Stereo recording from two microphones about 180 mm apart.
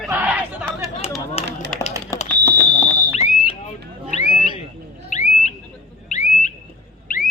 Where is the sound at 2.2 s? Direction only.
10° left (ahead or behind).